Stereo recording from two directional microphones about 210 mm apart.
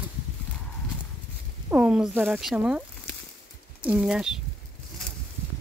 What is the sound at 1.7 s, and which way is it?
Speech, 5° right (ahead or behind).